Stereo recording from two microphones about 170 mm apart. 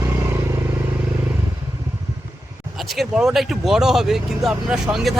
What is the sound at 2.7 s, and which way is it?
Speech, centre (ahead or behind).